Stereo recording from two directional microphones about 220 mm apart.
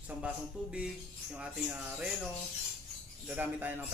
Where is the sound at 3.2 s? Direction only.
10° right (ahead or behind).